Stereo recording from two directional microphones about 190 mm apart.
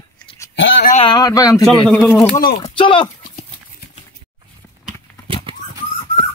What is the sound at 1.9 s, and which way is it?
Speech, 5° left (ahead or behind).